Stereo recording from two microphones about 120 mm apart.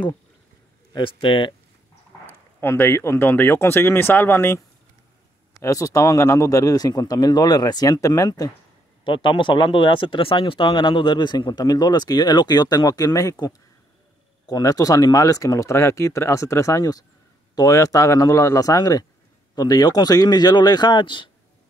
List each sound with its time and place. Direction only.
0.9 s speech: 45° left (ahead or behind)
2.2 s speech: 20° left (ahead or behind)
5.6 s speech: 30° left (ahead or behind)
9.0 s speech: 45° left (ahead or behind)